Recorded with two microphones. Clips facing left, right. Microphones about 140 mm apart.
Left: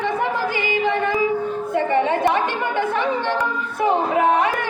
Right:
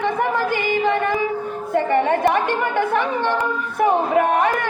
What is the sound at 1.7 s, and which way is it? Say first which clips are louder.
Music: right 2 dB; 50° right (ahead or behind).